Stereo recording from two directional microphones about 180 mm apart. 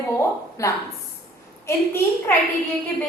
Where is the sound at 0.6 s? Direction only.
15° left (ahead or behind).